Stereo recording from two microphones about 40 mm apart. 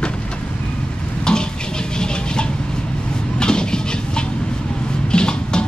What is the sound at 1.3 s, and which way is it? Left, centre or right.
Vehicle, centre.